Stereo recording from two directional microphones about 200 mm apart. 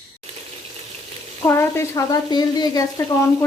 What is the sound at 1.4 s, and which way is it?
Speech, 10° left (ahead or behind).